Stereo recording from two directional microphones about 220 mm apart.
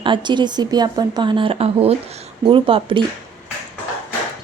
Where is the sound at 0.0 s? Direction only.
20° right (ahead or behind).